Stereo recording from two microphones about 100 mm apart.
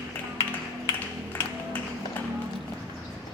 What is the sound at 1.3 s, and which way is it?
Music, 20° left (ahead or behind).